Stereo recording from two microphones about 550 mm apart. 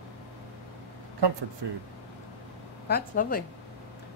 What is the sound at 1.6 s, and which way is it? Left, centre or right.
Speech, right.